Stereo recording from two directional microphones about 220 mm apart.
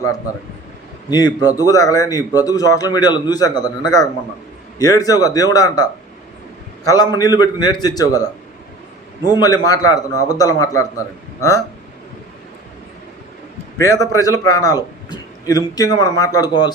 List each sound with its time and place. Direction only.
1.5 s a man's voice: 15° left (ahead or behind)
9.3 s a man's voice: 15° left (ahead or behind)
13.7 s a man's voice: 15° left (ahead or behind)